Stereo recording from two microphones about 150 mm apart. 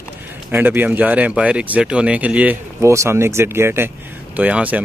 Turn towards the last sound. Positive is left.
turn(degrees=-10)  # may be behind; listen again after turning